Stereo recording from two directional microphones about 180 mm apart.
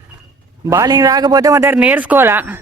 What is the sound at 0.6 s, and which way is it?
Speech, 20° right (ahead or behind).